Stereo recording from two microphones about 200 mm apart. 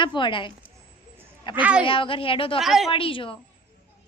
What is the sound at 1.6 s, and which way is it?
Speech, 5° right (ahead or behind).